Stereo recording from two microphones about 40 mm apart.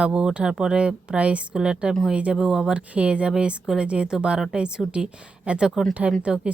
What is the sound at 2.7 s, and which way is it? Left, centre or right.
A woman's voice, right.